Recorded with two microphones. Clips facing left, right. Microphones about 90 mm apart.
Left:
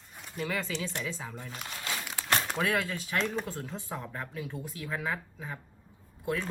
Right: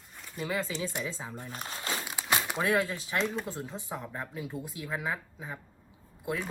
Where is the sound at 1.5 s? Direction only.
35° right (ahead or behind).